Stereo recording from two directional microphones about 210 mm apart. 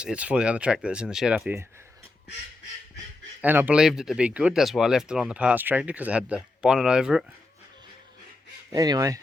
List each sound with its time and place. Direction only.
0.0 s speech: 5° right (ahead or behind)
3.4 s speech: 10° right (ahead or behind)
8.7 s speech: 15° right (ahead or behind)